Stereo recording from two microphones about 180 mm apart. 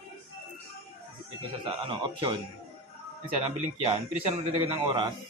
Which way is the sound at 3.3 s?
35° right (ahead or behind).